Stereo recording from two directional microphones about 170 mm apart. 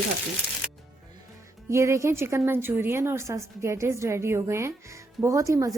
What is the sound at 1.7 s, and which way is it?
Speech, 15° right (ahead or behind).